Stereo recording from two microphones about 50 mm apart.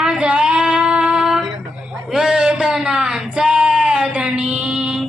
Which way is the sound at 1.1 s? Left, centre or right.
Centre.